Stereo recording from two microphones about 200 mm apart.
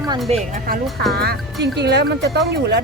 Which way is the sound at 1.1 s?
50° right (ahead or behind).